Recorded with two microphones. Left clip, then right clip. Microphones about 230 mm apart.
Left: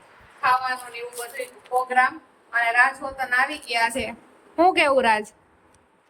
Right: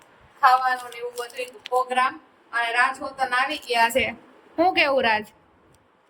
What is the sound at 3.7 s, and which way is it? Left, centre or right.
Speech, right.